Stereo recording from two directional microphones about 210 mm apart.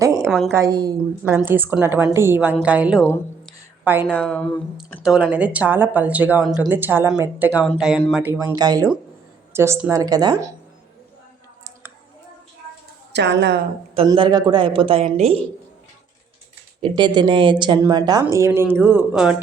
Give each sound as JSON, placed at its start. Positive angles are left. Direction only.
{"t": 0.0, "sound": "a sound", "side_deg": -15}
{"t": 0.3, "sound": "a woman's voice", "side_deg": 0}
{"t": 0.5, "sound": "a woman's voice", "side_deg": -15}
{"t": 3.4, "sound": "a sound", "side_deg": -10}
{"t": 4.1, "sound": "a woman's voice", "side_deg": 5}
{"t": 13.1, "sound": "a woman's voice", "side_deg": -55}
{"t": 13.9, "sound": "speech", "side_deg": -20}
{"t": 16.8, "sound": "a woman's voice", "side_deg": -20}